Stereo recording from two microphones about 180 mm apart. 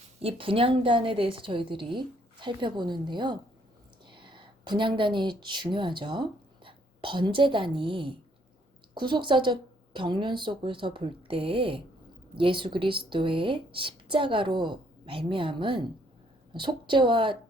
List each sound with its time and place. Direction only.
0.2 s a woman's voice: 30° right (ahead or behind)